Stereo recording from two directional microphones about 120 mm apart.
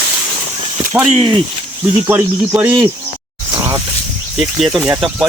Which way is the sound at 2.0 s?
15° right (ahead or behind).